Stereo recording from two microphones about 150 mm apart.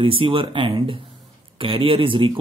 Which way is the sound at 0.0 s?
35° right (ahead or behind).